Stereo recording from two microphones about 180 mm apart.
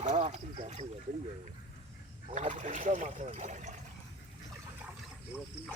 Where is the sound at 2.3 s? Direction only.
40° right (ahead or behind).